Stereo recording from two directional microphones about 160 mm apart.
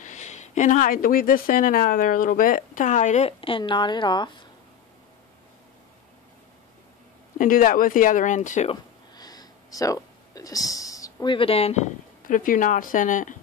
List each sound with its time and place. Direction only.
0.0 s speech: 50° left (ahead or behind); by 4.5 s 30° left (ahead or behind)
7.3 s speech: 60° left (ahead or behind)
9.1 s a sound: 25° left (ahead or behind)
11.3 s speech: 35° left (ahead or behind); by 13.4 s 55° left (ahead or behind)